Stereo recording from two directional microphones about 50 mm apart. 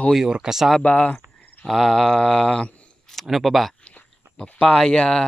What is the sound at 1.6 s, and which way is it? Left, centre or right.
Speech, centre.